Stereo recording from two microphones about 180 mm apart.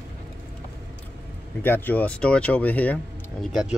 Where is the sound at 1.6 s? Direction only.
10° left (ahead or behind).